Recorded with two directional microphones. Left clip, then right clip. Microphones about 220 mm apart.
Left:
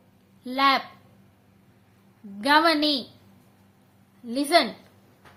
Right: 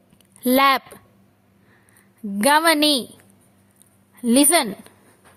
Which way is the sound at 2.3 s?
50° right (ahead or behind).